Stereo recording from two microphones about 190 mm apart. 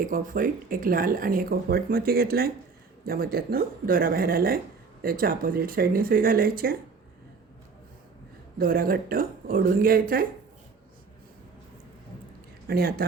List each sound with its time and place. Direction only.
0.0 s speech: 45° right (ahead or behind)
8.5 s speech: 50° right (ahead or behind)
12.6 s speech: 55° right (ahead or behind)